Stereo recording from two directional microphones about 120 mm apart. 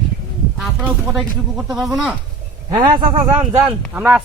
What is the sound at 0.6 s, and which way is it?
Speech, 5° right (ahead or behind).